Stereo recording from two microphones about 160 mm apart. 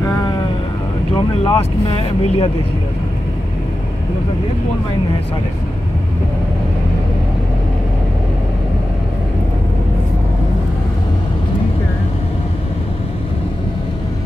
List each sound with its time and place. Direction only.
1.4 s speech: 35° left (ahead or behind)